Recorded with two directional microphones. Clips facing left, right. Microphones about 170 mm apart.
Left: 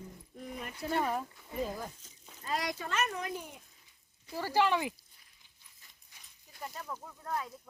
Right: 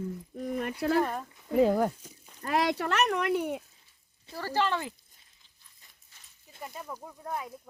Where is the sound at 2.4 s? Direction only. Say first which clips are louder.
Right 8 dB; 65° right (ahead or behind).